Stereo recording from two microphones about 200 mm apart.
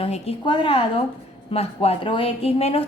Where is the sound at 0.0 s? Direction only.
30° left (ahead or behind).